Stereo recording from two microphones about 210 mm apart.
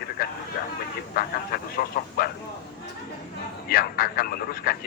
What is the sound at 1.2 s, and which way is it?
Speech, 45° left (ahead or behind).